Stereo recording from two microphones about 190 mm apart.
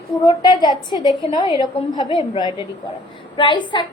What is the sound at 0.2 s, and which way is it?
A woman's voice, 20° left (ahead or behind).